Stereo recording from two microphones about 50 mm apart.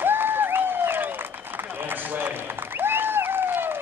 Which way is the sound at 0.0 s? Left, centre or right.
Right.